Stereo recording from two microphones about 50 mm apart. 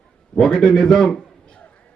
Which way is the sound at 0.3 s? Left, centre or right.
Centre.